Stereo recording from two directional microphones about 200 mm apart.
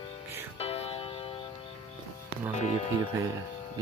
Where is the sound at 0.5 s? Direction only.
30° left (ahead or behind).